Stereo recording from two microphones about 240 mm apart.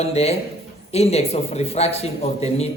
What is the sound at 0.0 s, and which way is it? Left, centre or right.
A man's voice, left.